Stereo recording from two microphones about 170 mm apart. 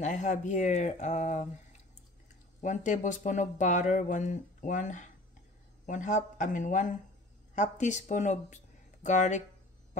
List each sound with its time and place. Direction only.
0.0 s speech: 45° left (ahead or behind)
2.6 s speech: 45° left (ahead or behind)